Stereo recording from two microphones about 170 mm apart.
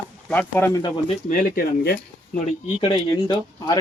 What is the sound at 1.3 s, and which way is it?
Speech, 50° left (ahead or behind).